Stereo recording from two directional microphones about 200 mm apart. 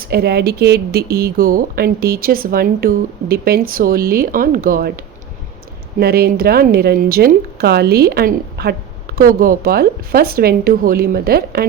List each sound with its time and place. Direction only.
0.1 s speech: 50° right (ahead or behind)